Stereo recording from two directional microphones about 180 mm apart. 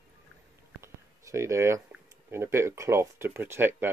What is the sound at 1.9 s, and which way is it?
Speech, 15° right (ahead or behind).